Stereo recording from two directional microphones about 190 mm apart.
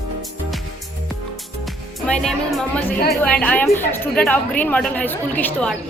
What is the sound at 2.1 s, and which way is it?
A woman's voice, 5° left (ahead or behind).